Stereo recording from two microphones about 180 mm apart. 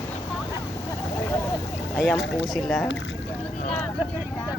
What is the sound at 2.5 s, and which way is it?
Speech, centre (ahead or behind).